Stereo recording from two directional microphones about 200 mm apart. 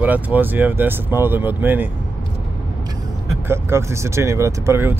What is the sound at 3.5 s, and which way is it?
Speech, 10° right (ahead or behind).